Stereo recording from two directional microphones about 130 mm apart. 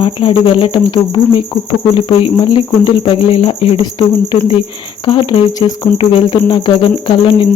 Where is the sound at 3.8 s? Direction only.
40° left (ahead or behind).